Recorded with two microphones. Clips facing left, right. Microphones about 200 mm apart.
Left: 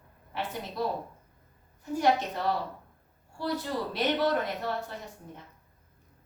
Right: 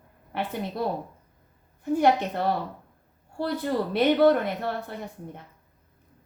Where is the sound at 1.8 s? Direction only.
55° right (ahead or behind).